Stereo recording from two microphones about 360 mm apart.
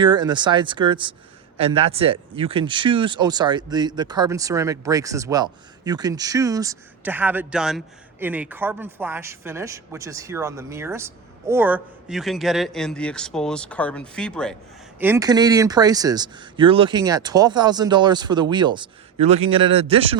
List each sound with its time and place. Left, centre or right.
0.0 s speech: centre